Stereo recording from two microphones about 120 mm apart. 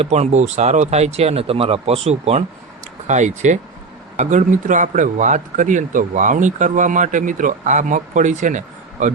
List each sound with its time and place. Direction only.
0.0 s speech: 65° right (ahead or behind)
3.1 s speech: 85° right